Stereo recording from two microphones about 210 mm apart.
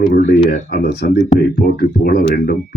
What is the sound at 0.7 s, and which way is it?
Speech, 55° left (ahead or behind).